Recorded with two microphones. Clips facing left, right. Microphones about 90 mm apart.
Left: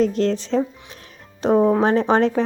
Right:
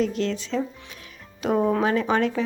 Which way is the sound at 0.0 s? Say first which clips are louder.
Left 6 dB; 40° left (ahead or behind).